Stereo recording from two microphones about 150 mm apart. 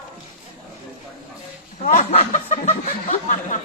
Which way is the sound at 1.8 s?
65° left (ahead or behind).